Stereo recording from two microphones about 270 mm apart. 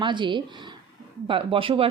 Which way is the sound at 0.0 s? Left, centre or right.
Centre.